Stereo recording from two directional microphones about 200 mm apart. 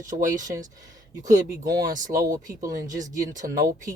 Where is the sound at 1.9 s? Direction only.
40° right (ahead or behind).